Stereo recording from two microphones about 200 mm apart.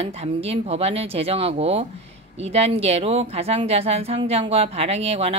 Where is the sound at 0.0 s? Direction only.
30° right (ahead or behind).